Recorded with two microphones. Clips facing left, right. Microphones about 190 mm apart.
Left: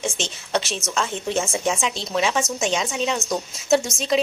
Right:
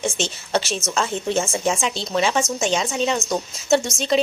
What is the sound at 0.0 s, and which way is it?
Speech, centre (ahead or behind).